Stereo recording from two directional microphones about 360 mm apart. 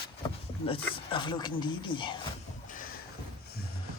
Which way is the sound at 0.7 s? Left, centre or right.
Centre.